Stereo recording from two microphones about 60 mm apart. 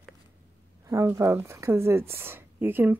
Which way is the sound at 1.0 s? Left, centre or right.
Right.